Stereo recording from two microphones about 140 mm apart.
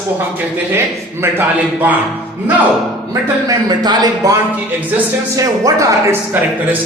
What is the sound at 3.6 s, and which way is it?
Speech, 30° right (ahead or behind).